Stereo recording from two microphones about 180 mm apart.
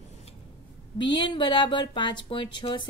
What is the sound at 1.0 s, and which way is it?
Speech, 25° left (ahead or behind).